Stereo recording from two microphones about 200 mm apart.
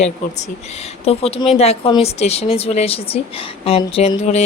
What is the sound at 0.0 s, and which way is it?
Speech, 35° left (ahead or behind).